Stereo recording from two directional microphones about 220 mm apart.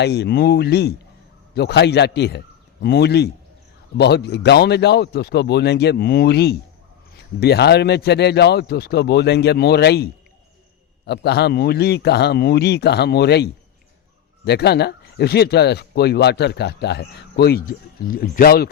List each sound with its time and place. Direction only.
0.0 s speech: 50° left (ahead or behind)